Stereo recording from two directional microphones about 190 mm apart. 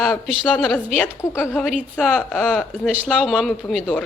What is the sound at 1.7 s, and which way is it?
A woman's voice, centre (ahead or behind).